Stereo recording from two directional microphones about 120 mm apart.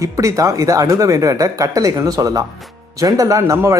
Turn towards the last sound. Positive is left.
turn(degrees=-25)  # may be behind; listen again after turning